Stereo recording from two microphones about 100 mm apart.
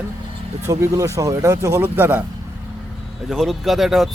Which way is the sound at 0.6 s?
30° right (ahead or behind).